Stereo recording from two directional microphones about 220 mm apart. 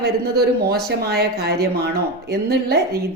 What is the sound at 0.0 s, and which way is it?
Speech, 45° right (ahead or behind).